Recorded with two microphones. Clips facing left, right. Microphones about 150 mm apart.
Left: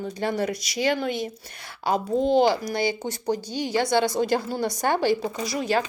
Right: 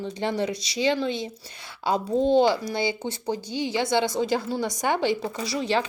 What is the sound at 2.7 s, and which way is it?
A woman's voice, 25° right (ahead or behind).